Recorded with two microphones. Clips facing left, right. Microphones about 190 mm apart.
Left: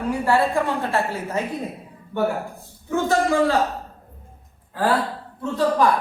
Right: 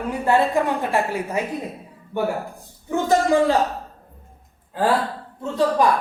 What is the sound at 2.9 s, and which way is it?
Speech, 15° right (ahead or behind).